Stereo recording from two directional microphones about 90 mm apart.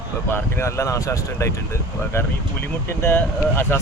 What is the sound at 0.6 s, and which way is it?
Speech, 35° left (ahead or behind).